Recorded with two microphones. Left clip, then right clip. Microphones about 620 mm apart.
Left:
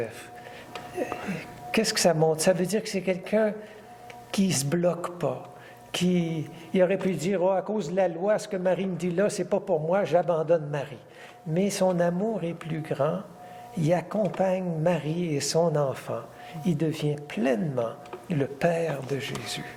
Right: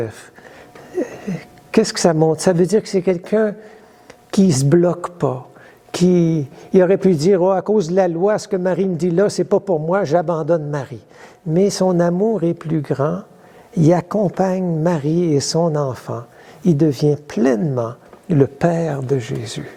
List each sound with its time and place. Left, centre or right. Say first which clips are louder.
1.7 s speech: right 8 dB; right
4.7 s speech: right 9 dB; right
6.0 s speech: right 13 dB; right
15.5 s speech: right 6 dB; right
16.6 s speech: right 13 dB; right